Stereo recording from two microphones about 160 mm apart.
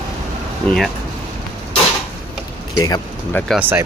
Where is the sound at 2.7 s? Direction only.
25° left (ahead or behind).